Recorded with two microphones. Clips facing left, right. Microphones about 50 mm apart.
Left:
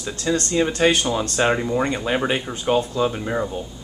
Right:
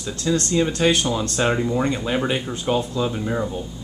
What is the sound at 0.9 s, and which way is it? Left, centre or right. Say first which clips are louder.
Speech: even; centre.